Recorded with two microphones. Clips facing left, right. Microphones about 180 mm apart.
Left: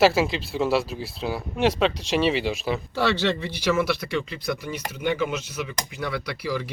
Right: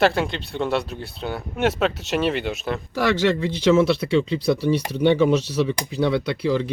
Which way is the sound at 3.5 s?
25° right (ahead or behind).